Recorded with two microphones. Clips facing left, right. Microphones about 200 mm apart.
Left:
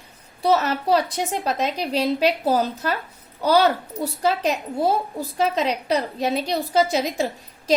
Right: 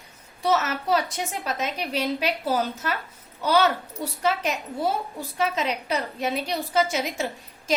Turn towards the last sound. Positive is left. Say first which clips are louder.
# left 4 dB
turn(degrees=35)  # may be behind; listen again after turning